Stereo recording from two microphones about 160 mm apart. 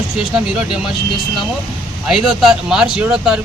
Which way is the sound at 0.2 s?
5° right (ahead or behind).